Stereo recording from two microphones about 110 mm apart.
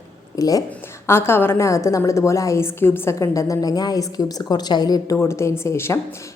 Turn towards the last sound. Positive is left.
turn(degrees=25)  # may be behind; listen again after turning